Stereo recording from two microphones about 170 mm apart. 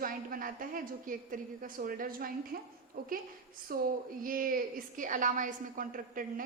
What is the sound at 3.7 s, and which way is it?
A woman's voice, 60° right (ahead or behind).